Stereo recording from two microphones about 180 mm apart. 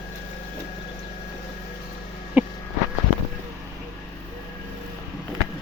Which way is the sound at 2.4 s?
10° right (ahead or behind).